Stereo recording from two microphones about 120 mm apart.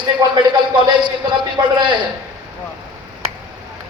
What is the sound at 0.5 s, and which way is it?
A man's voice, 40° right (ahead or behind).